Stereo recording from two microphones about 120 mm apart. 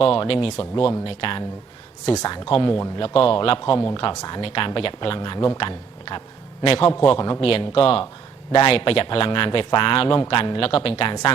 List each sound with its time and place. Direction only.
0.0 s a man's voice: 45° left (ahead or behind)
4.1 s speech: 30° left (ahead or behind)
4.4 s a man's voice: 50° left (ahead or behind)